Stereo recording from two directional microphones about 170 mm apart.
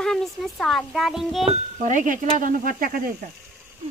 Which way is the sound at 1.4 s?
50° right (ahead or behind).